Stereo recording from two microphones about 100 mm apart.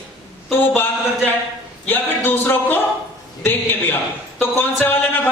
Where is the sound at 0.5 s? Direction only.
20° left (ahead or behind).